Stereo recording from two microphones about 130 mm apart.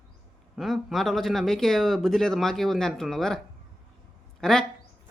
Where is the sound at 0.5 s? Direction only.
Centre (ahead or behind).